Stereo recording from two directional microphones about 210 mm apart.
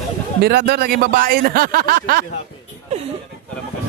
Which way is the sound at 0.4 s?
50° right (ahead or behind).